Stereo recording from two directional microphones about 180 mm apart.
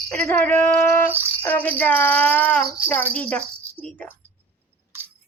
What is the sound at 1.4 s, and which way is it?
Music, 10° left (ahead or behind).